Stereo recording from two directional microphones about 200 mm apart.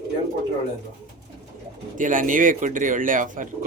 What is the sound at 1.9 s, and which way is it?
Speech, 40° right (ahead or behind).